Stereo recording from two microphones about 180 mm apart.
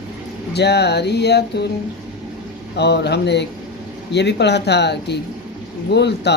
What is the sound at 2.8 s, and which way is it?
Speech, 70° left (ahead or behind).